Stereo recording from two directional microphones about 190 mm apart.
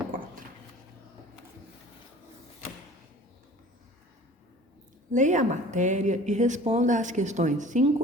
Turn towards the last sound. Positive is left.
turn(degrees=-40)  # may be behind; listen again after turning